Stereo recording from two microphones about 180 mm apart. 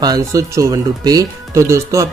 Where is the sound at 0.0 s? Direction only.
20° right (ahead or behind).